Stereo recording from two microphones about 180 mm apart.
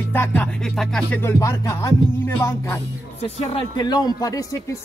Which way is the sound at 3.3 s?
25° left (ahead or behind).